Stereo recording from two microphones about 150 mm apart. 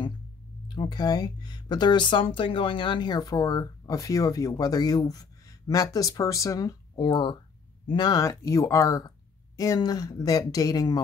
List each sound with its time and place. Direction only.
0.7 s speech: 25° left (ahead or behind)